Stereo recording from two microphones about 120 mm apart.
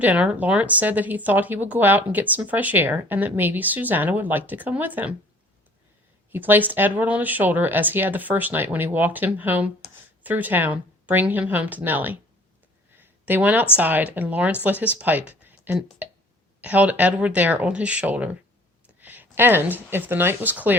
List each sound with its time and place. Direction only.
0.0 s speech: 10° right (ahead or behind)
6.3 s speech: 15° right (ahead or behind)
13.0 s a sound: 15° right (ahead or behind)
13.7 s speech: 15° right (ahead or behind)